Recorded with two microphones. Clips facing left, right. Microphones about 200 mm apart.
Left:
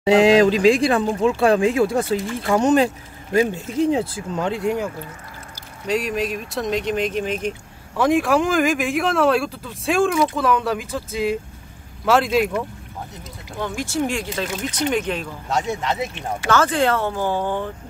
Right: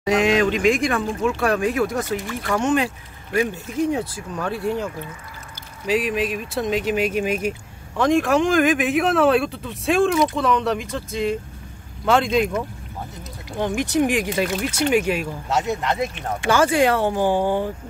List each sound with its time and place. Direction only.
0.0 s speech: 30° left (ahead or behind)
2.6 s speech: 35° left (ahead or behind); by 4.8 s 15° left (ahead or behind)
5.9 s speech: centre (ahead or behind)
8.0 s speech: 5° left (ahead or behind)
13.6 s speech: 20° right (ahead or behind); by 16.0 s centre (ahead or behind)
16.4 s speech: 10° right (ahead or behind)